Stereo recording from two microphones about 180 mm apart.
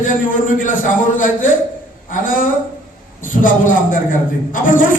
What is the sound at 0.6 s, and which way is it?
A man's voice, 45° left (ahead or behind).